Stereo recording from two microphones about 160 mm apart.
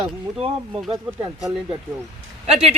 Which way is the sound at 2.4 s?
40° right (ahead or behind).